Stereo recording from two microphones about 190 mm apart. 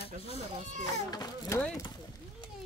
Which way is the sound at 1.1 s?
15° left (ahead or behind).